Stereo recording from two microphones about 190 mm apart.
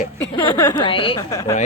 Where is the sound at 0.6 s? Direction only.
20° left (ahead or behind).